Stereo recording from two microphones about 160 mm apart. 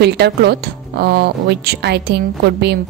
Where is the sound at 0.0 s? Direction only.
90° right.